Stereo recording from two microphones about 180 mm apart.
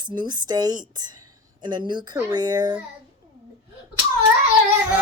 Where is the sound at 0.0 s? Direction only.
25° right (ahead or behind).